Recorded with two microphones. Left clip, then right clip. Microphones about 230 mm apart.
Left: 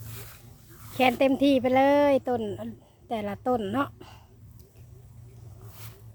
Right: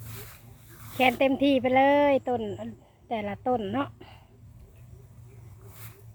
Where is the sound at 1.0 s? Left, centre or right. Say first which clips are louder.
Left 1 dB; centre.